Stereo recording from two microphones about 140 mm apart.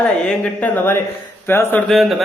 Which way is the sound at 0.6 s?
15° left (ahead or behind).